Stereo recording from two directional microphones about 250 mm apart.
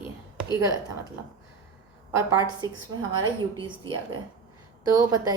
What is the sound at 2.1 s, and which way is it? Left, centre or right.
Speech, centre.